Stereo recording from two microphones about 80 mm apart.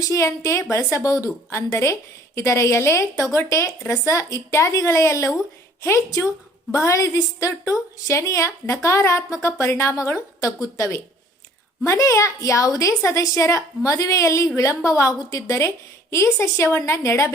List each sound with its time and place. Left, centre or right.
0.0 s a woman's voice: left